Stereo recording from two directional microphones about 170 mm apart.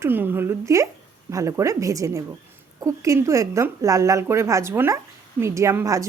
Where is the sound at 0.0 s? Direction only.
10° right (ahead or behind).